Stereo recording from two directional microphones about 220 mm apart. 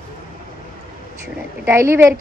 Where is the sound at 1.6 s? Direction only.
10° right (ahead or behind).